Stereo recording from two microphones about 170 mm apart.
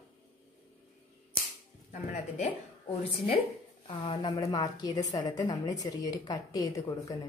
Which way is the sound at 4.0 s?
30° left (ahead or behind).